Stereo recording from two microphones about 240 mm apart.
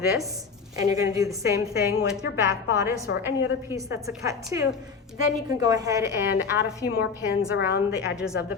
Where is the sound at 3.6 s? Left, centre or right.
Centre.